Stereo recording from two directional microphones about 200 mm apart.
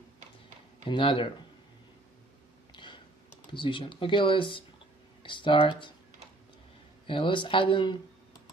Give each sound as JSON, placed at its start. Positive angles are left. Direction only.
{"t": 0.8, "sound": "speech", "side_deg": 25}
{"t": 2.7, "sound": "a sound", "side_deg": 25}
{"t": 3.4, "sound": "speech", "side_deg": 25}
{"t": 7.1, "sound": "speech", "side_deg": 25}